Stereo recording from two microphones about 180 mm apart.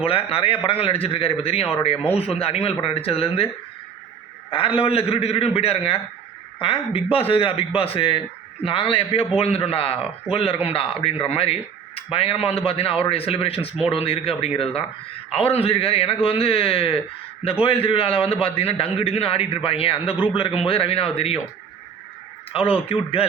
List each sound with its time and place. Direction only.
0.0 s a man's voice: 30° left (ahead or behind)
4.8 s a man's voice: 30° left (ahead or behind)
22.5 s a man's voice: 30° left (ahead or behind)